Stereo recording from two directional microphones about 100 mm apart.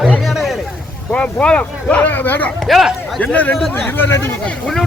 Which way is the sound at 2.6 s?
Centre (ahead or behind).